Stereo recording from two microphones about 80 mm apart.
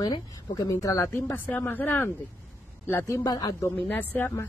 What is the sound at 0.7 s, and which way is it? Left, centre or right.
Speech, left.